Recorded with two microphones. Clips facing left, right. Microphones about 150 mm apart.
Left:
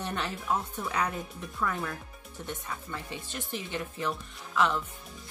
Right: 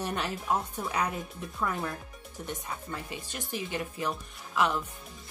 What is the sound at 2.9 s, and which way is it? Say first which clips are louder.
Speech: even; 10° right (ahead or behind).